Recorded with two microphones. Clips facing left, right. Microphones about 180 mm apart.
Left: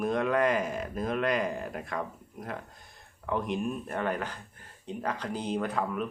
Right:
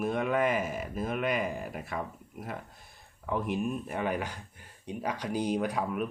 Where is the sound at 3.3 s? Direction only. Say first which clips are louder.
Even; 5° right (ahead or behind).